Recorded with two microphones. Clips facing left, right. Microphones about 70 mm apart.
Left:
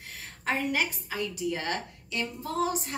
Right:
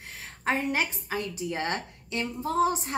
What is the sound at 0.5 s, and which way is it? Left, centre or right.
A woman's voice, right.